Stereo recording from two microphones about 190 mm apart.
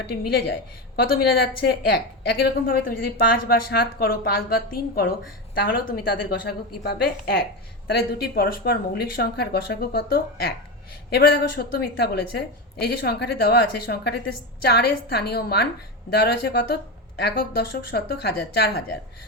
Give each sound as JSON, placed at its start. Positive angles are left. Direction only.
{"t": 0.1, "sound": "a woman's voice", "side_deg": 55}